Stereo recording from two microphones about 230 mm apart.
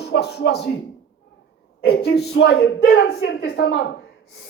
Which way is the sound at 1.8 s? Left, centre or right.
Left.